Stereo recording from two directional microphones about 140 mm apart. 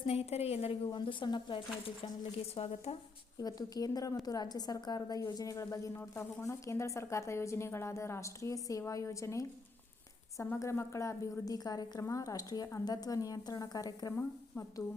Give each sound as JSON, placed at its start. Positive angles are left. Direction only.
{"t": 0.1, "sound": "a woman's voice", "side_deg": 45}
{"t": 0.9, "sound": "speech", "side_deg": 35}
{"t": 2.6, "sound": "a woman's voice", "side_deg": 45}
{"t": 3.4, "sound": "a woman's voice", "side_deg": 25}
{"t": 14.2, "sound": "speech", "side_deg": 15}